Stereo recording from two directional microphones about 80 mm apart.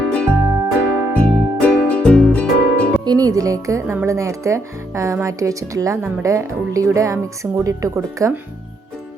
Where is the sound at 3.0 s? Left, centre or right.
Right.